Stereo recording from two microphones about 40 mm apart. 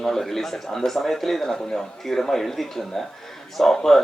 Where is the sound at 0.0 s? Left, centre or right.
Centre.